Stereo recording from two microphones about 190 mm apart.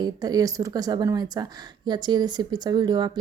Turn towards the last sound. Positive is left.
turn(degrees=-20)  # may be behind; listen again after turning